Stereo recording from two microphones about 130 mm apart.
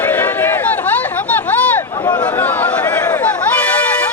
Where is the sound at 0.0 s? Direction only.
15° left (ahead or behind).